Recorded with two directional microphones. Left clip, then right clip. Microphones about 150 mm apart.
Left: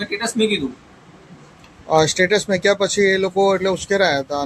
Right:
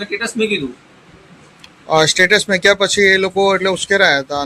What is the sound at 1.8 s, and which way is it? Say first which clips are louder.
Speech: right 4 dB; centre (ahead or behind).